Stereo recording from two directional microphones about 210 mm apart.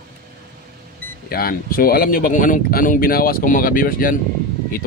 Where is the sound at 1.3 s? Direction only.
45° left (ahead or behind).